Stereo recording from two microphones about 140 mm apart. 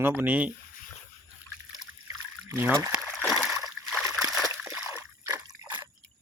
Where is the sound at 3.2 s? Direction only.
Centre (ahead or behind).